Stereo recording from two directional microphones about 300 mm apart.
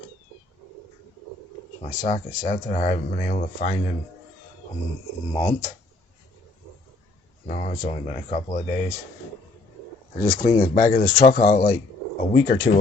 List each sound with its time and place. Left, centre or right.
1.8 s speech: left
5.3 s speech: centre
7.4 s speech: left
10.2 s speech: left